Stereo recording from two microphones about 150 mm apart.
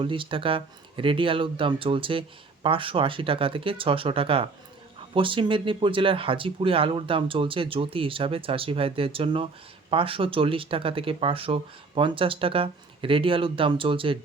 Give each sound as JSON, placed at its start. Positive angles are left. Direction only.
{"t": 0.0, "sound": "speech", "side_deg": -35}